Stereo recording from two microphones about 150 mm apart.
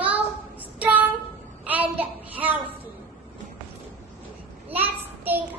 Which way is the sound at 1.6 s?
10° right (ahead or behind).